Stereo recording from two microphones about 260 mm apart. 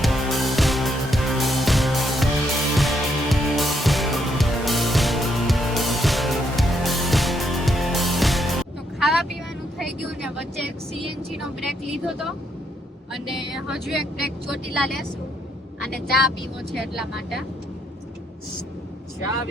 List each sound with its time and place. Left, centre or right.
0.0 s music: centre
9.0 s vehicle: centre
13.1 s speech: centre
15.8 s speech: left
16.7 s speech: centre